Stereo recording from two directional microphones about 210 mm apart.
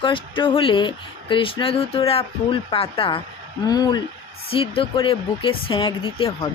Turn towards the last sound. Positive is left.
turn(degrees=25)  # may be behind; listen again after turning